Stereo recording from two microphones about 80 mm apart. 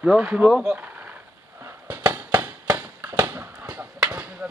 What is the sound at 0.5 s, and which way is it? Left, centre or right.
Speech, centre.